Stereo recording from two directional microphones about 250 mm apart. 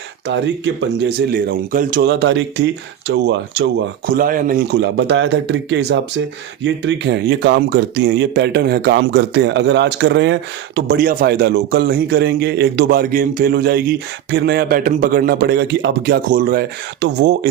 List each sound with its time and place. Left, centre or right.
0.3 s speech: right
4.1 s a man's voice: right